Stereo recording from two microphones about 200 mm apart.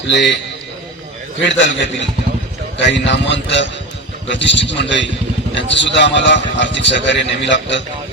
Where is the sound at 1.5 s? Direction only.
65° left (ahead or behind).